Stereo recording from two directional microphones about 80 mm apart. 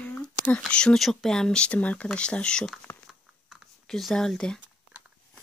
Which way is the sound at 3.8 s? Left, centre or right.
Centre.